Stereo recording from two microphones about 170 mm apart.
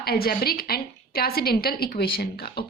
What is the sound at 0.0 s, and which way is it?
A woman's voice, 65° left (ahead or behind).